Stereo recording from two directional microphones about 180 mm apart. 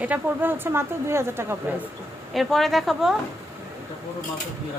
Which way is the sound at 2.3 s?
Centre (ahead or behind).